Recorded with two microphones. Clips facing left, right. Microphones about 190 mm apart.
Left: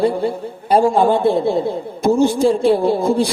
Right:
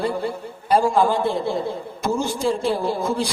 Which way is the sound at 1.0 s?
60° left (ahead or behind).